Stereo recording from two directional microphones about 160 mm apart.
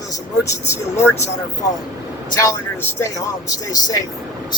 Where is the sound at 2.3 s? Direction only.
20° left (ahead or behind).